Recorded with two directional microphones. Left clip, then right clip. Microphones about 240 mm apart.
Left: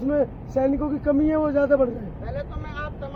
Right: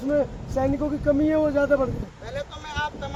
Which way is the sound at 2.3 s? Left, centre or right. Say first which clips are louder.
Right 4 dB; centre.